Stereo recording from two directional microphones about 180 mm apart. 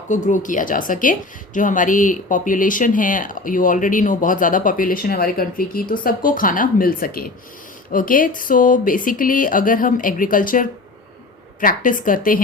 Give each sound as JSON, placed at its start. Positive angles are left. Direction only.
{"t": 0.1, "sound": "speech", "side_deg": 45}